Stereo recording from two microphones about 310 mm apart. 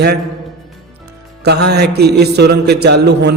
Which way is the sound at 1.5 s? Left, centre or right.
Right.